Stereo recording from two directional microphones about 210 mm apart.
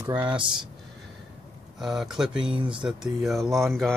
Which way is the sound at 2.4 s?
25° right (ahead or behind).